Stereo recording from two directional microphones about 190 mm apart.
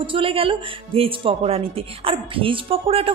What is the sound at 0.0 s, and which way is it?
Speech, 25° right (ahead or behind).